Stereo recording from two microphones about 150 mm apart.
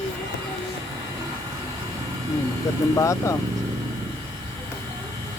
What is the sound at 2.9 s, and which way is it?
Speech, 20° left (ahead or behind).